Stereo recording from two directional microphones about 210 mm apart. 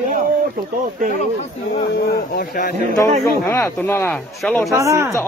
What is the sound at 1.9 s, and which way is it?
Speech, 50° left (ahead or behind).